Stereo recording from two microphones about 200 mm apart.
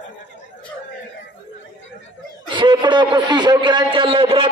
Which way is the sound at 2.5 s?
25° right (ahead or behind).